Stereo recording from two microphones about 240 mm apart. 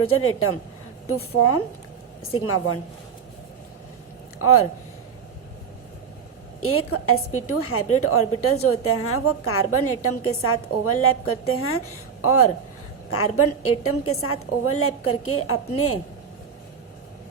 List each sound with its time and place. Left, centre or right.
0.1 s a woman's voice: left
4.4 s speech: left
6.6 s a woman's voice: left